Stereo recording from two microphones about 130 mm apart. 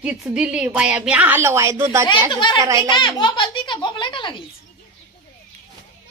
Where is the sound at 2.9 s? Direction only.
35° left (ahead or behind).